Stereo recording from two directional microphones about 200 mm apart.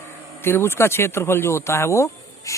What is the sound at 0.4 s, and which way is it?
Speech, 10° left (ahead or behind).